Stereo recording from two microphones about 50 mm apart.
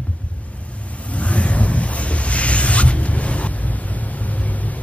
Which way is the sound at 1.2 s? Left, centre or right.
Left.